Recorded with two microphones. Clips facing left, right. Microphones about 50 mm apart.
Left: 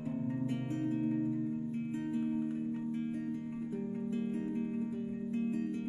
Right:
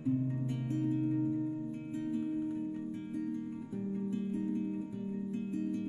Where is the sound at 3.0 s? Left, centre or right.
Left.